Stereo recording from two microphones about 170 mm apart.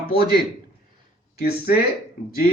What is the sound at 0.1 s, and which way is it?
Speech, 65° left (ahead or behind).